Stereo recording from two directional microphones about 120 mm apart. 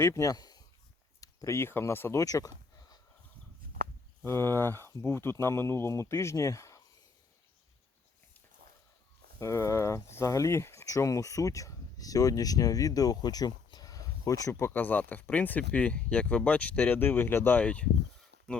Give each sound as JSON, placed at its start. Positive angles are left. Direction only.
{"t": 0.0, "sound": "speech", "side_deg": 25}
{"t": 4.2, "sound": "speech", "side_deg": 20}
{"t": 9.4, "sound": "speech", "side_deg": 25}